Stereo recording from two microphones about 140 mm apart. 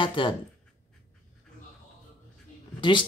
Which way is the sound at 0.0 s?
35° left (ahead or behind).